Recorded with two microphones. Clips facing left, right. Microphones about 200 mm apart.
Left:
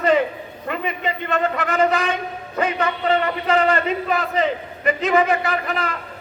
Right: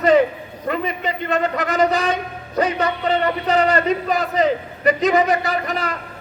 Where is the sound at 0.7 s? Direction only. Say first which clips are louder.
Right 2 dB; 35° right (ahead or behind).